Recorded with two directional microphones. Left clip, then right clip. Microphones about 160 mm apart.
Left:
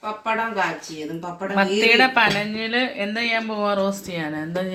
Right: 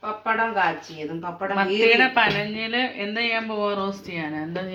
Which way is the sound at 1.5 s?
20° left (ahead or behind).